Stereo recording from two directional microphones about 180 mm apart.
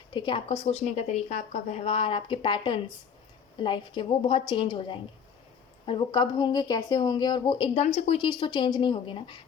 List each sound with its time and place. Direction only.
0.1 s a woman's voice: 25° left (ahead or behind)